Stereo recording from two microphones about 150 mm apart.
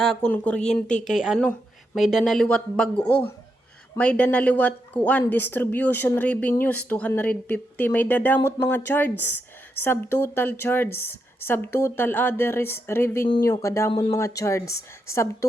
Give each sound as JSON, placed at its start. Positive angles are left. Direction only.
{"t": 0.0, "sound": "a woman's voice", "side_deg": 5}
{"t": 13.2, "sound": "speech", "side_deg": 30}
{"t": 13.5, "sound": "speech", "side_deg": 20}